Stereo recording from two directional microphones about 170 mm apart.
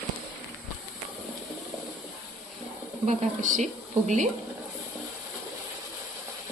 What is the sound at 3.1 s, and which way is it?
Speech, 45° right (ahead or behind).